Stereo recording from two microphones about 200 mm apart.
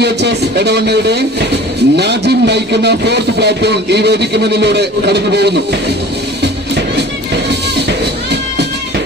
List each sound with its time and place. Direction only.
0.0 s speech: 55° right (ahead or behind)
6.4 s music: 55° right (ahead or behind)